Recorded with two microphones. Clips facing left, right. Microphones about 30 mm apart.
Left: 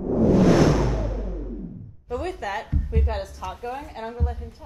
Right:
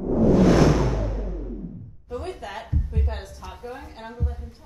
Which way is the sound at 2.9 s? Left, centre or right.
Left.